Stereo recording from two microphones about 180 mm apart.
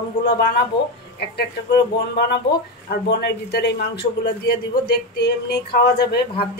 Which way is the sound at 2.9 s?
65° left (ahead or behind).